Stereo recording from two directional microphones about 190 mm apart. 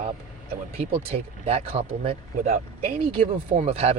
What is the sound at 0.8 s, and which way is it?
Speech, 30° right (ahead or behind).